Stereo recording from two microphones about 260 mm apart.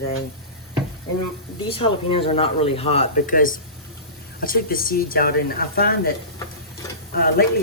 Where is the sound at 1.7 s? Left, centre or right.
Left.